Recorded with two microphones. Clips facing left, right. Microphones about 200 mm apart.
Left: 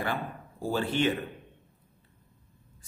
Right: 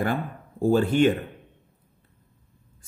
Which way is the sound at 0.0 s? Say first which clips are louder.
Right 6 dB; 45° right (ahead or behind).